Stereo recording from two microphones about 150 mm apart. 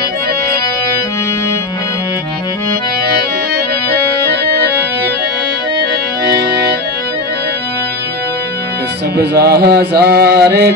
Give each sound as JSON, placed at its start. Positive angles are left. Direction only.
{"t": 4.3, "sound": "accordion", "side_deg": -90}
{"t": 9.1, "sound": "mantra", "side_deg": -90}